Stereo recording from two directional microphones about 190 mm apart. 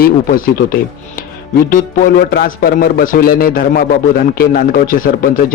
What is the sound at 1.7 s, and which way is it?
Speech, 50° left (ahead or behind).